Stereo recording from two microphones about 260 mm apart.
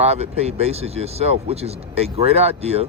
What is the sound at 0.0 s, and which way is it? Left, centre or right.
Speech, right.